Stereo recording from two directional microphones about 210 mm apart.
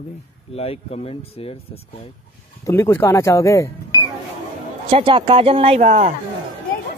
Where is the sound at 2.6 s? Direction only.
15° left (ahead or behind).